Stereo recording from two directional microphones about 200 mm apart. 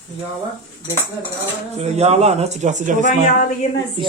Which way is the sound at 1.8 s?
30° right (ahead or behind).